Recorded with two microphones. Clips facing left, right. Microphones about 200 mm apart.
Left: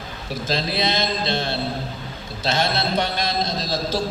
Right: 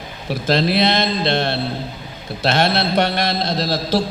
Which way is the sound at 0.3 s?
65° right (ahead or behind).